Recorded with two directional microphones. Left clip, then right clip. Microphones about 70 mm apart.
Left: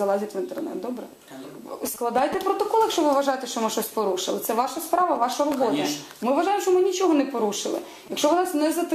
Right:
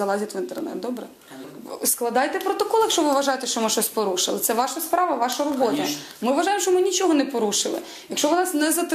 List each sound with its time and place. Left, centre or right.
0.0 s speech: right
1.8 s speech: right